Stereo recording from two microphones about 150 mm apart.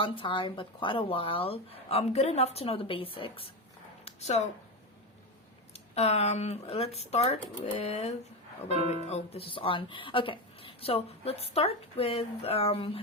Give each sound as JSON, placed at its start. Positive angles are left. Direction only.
{"t": 0.0, "sound": "speech", "side_deg": 35}
{"t": 4.0, "sound": "a sound", "side_deg": 50}
{"t": 5.7, "sound": "speech", "side_deg": 45}